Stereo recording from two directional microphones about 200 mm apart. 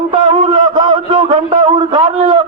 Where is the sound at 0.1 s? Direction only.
25° right (ahead or behind).